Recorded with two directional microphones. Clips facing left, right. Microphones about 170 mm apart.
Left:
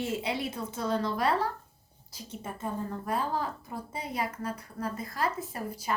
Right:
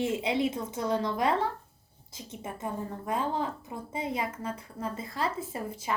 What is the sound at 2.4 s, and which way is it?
A woman's voice, 20° right (ahead or behind).